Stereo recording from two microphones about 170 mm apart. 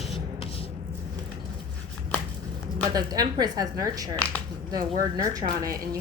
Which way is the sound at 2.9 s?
25° right (ahead or behind).